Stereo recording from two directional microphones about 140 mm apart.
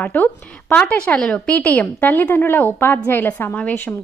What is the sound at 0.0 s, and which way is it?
A woman's voice, 10° left (ahead or behind).